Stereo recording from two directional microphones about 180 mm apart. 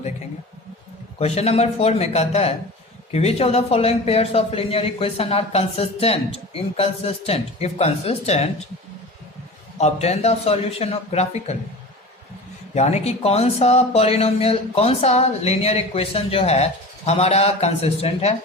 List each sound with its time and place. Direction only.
1.2 s speech: 35° left (ahead or behind)
9.7 s speech: 35° left (ahead or behind)
12.7 s speech: 40° left (ahead or behind)